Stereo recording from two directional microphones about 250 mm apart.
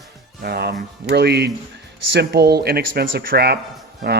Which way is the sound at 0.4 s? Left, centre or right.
Right.